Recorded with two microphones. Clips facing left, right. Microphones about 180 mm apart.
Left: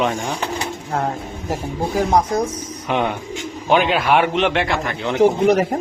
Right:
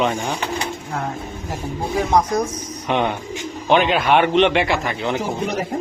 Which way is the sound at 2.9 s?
Centre (ahead or behind).